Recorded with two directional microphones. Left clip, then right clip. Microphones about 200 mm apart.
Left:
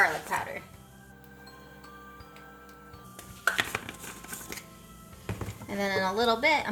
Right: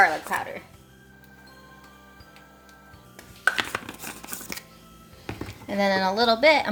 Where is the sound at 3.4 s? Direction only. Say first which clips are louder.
Right 4 dB; 35° right (ahead or behind).